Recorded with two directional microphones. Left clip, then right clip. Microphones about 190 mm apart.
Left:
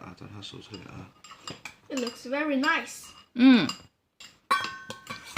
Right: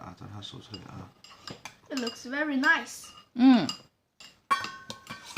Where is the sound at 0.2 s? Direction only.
20° right (ahead or behind).